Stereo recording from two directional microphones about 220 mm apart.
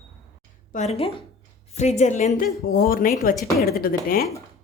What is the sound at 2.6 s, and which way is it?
Speech, 45° left (ahead or behind).